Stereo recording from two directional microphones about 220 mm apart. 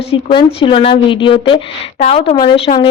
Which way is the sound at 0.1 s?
20° left (ahead or behind).